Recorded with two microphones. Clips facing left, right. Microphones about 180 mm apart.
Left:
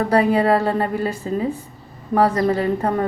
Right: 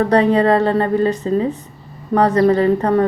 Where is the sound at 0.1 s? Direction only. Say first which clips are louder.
Right 1 dB; 5° left (ahead or behind).